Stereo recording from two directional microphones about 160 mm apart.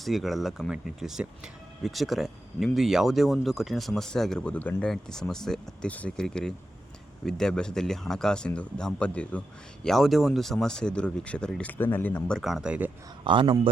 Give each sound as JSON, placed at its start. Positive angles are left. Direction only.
{"t": 0.0, "sound": "speech", "side_deg": 0}
{"t": 13.2, "sound": "a man's voice", "side_deg": -30}